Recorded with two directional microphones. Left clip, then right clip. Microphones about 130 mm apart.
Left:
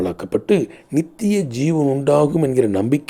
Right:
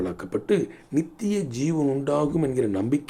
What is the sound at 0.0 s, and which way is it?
Speech, 40° left (ahead or behind).